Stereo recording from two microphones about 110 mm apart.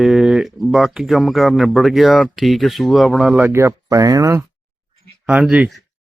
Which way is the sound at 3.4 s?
20° right (ahead or behind).